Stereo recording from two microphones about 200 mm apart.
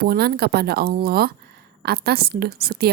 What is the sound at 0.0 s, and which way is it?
A woman's voice, 50° right (ahead or behind).